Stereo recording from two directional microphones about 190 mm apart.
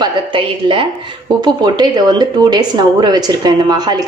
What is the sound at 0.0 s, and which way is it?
A woman's voice, 25° right (ahead or behind).